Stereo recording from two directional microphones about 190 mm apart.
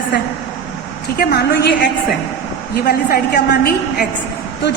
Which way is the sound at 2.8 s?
50° left (ahead or behind).